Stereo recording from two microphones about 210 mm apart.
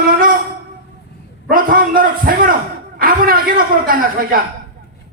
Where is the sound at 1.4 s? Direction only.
40° right (ahead or behind).